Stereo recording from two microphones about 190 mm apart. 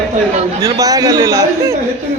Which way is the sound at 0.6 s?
20° right (ahead or behind).